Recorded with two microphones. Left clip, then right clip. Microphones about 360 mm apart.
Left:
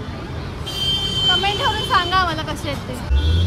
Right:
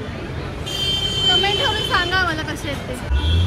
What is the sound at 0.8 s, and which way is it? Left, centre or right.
Vehicle, left.